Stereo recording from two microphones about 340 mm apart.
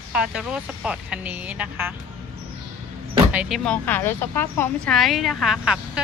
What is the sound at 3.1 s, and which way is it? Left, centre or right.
Speech, centre.